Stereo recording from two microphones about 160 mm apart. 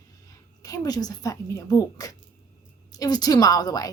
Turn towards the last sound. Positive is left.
turn(degrees=25)  # may be behind; listen again after turning